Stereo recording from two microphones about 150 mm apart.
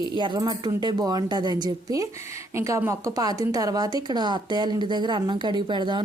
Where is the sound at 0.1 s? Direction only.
30° right (ahead or behind).